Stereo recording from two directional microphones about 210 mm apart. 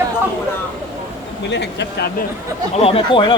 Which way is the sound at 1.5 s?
55° left (ahead or behind).